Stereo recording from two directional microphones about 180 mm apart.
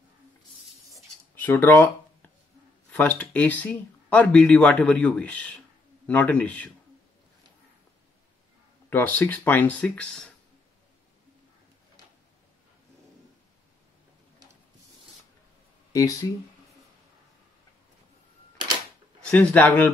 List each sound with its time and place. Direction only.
1.3 s speech: 10° left (ahead or behind)
2.9 s speech: 5° left (ahead or behind)
8.9 s speech: 10° left (ahead or behind)
15.9 s speech: 20° left (ahead or behind)
19.3 s speech: 10° left (ahead or behind)